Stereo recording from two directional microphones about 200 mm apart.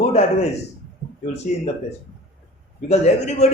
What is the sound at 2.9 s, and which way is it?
Speech, 35° left (ahead or behind).